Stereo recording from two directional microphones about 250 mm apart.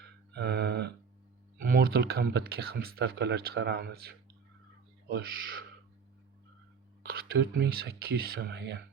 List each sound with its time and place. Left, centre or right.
0.3 s a sound: right
1.7 s speech: right
7.1 s speech: right